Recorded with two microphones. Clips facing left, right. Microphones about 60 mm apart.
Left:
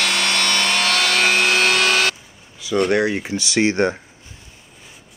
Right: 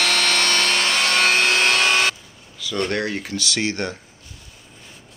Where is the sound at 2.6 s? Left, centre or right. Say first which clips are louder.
Left 6 dB; centre.